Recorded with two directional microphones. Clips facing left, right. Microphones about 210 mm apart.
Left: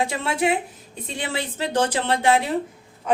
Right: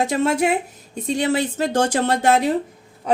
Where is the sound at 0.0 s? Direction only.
45° right (ahead or behind).